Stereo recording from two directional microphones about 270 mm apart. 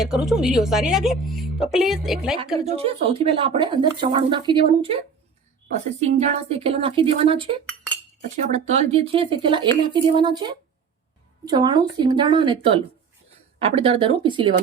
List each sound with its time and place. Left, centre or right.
0.0 s a woman's voice: centre
2.6 s speech: right
6.1 s a woman's voice: right